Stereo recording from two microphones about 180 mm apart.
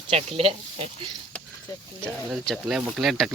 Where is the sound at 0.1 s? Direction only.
35° right (ahead or behind).